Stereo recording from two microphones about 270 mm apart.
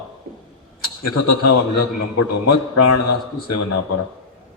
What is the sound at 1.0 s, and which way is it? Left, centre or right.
A man's voice, left.